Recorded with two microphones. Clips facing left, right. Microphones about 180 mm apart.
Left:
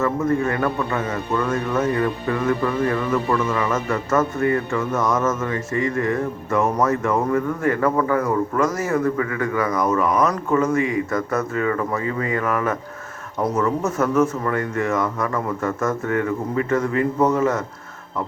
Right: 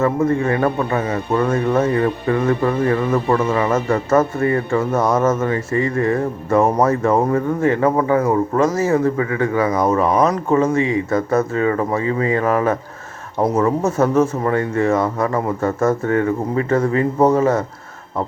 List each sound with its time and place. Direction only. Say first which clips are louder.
0.0 s a man's voice: right 3 dB; 30° right (ahead or behind)